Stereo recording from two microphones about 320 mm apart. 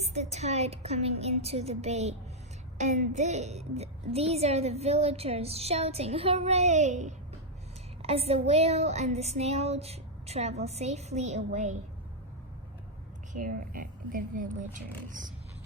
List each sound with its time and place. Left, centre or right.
0.0 s a child's voice: right
13.3 s a child's voice: right